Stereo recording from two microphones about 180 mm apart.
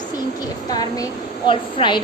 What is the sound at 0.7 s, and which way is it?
A woman's voice, 20° left (ahead or behind).